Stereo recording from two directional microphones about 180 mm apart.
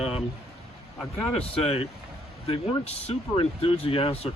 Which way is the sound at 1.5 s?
35° left (ahead or behind).